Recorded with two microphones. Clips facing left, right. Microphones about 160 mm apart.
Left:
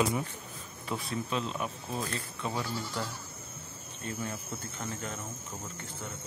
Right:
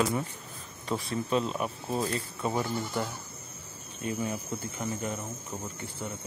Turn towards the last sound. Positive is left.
turn(degrees=-10)  # may be behind; listen again after turning